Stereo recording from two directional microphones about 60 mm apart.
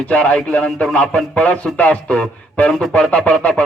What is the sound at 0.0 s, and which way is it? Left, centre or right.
A man's voice, left.